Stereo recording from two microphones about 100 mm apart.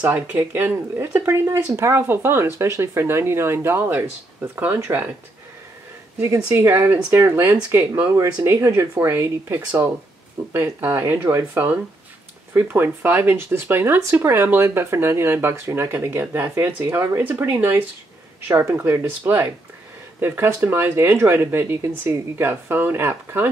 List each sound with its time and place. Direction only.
0.0 s speech: 15° right (ahead or behind)
6.2 s speech: 25° right (ahead or behind)